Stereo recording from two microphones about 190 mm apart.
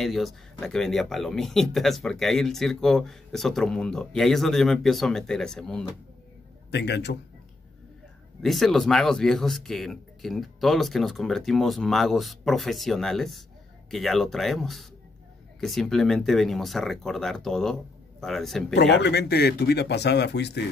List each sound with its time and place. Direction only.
0.0 s speech: centre (ahead or behind)
6.7 s speech: 60° left (ahead or behind)
8.4 s speech: centre (ahead or behind)
18.8 s speech: 60° left (ahead or behind)